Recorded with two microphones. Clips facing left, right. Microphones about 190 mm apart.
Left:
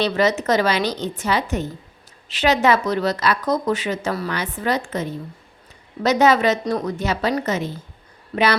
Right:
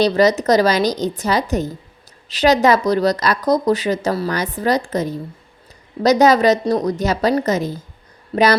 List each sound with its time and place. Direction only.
0.0 s speech: 35° right (ahead or behind)